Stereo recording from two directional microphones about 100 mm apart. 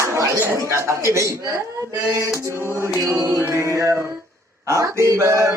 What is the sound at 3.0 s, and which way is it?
Music, 30° right (ahead or behind).